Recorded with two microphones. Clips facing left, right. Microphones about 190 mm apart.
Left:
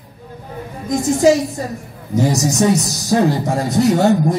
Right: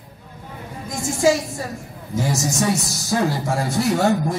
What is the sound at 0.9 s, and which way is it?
Speech, 20° left (ahead or behind).